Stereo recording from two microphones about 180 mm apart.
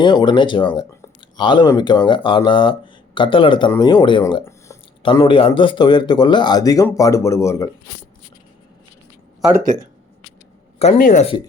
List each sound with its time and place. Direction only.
0.0 s speech: 25° left (ahead or behind)
9.4 s speech: 10° right (ahead or behind)
10.8 s speech: 45° left (ahead or behind)